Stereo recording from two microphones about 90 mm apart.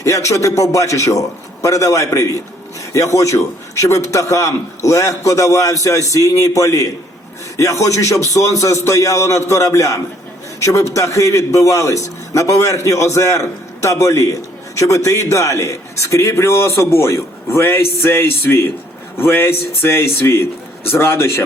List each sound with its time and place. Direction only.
0.0 s a man's voice: 35° left (ahead or behind)